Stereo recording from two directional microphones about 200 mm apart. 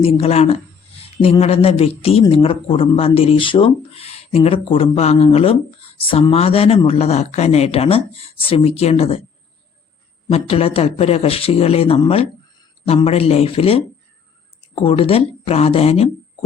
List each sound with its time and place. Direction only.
0.0 s speech: 30° left (ahead or behind)
10.3 s speech: 30° left (ahead or behind)